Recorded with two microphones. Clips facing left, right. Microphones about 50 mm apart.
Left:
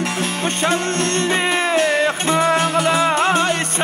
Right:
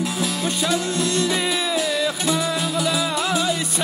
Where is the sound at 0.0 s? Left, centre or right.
Left.